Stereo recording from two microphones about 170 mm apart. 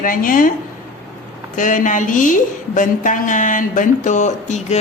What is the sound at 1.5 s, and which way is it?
A woman's voice, 50° left (ahead or behind).